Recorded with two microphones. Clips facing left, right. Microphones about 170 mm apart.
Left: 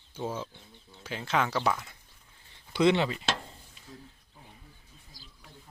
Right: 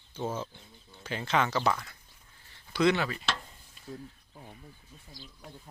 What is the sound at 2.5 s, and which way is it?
Speech, 20° left (ahead or behind).